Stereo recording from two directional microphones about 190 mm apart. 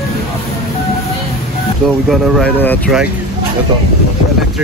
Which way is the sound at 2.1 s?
5° left (ahead or behind).